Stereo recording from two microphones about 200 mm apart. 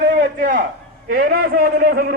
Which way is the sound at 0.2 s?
40° right (ahead or behind).